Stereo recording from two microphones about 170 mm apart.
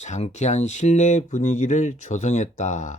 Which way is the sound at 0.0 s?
40° left (ahead or behind).